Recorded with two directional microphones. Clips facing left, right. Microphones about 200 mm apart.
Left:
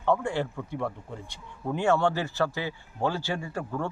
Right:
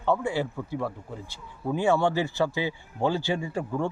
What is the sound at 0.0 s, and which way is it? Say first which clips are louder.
Speech: even; 5° right (ahead or behind).